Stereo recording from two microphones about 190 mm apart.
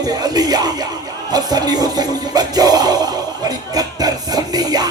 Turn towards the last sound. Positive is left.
turn(degrees=-20)  # may be behind; listen again after turning